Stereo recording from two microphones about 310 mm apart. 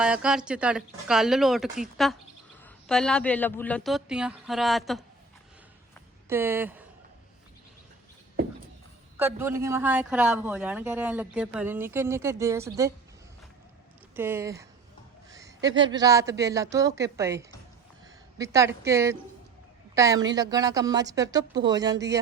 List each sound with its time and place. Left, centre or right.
0.0 s speech: centre
6.2 s speech: centre
9.1 s speech: centre
14.2 s speech: centre